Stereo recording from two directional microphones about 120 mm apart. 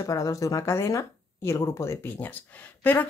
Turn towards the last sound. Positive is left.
turn(degrees=15)  # may be behind; listen again after turning